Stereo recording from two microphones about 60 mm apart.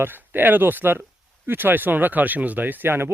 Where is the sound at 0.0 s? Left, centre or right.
Right.